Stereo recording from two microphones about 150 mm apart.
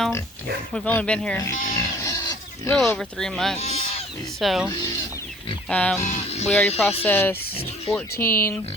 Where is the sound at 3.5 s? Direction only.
45° left (ahead or behind).